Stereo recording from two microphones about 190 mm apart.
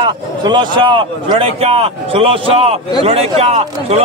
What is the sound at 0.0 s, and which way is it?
A man's voice, 25° right (ahead or behind).